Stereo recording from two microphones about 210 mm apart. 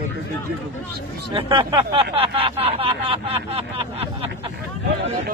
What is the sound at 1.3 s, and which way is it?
Speech, 25° right (ahead or behind).